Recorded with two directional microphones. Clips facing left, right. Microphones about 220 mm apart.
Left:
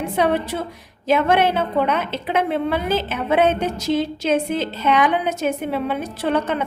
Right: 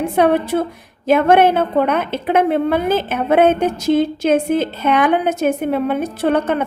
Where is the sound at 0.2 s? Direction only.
55° right (ahead or behind).